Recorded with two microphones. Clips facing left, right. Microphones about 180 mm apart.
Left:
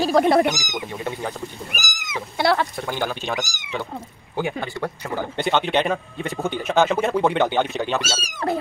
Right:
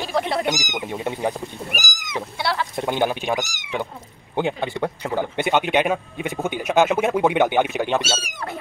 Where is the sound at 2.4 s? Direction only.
50° left (ahead or behind).